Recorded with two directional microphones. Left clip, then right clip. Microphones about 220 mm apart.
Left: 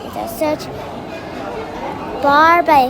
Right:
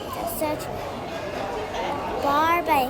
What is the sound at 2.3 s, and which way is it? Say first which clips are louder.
Speech: left 11 dB; 20° left (ahead or behind).